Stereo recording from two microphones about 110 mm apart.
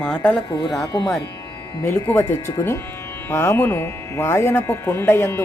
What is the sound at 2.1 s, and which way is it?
Speech, 15° left (ahead or behind).